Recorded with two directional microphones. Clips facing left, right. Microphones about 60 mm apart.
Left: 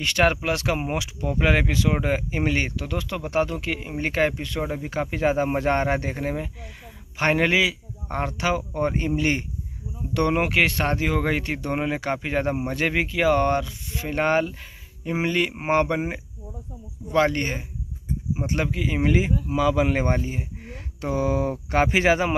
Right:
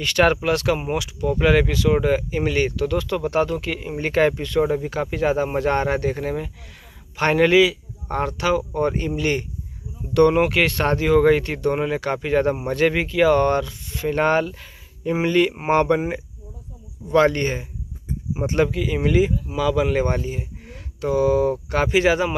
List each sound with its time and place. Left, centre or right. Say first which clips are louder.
0.0 s speech: right 3 dB; centre
4.8 s speech: right 2 dB; left; by 17.6 s centre
18.7 s speech: right 1 dB; centre